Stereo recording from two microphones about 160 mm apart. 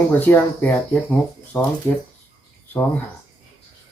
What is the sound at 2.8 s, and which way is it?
Speech, 5° left (ahead or behind).